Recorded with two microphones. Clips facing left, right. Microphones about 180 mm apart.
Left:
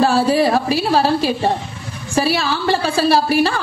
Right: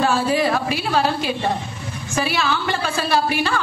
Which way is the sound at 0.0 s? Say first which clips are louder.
Left 4 dB; 35° left (ahead or behind).